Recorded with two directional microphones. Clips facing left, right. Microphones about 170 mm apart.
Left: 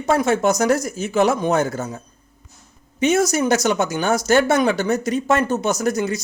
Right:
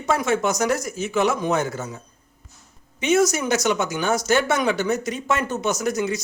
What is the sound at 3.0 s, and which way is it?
A man's voice, 35° left (ahead or behind).